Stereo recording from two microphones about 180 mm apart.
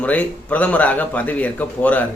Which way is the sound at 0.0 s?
10° left (ahead or behind).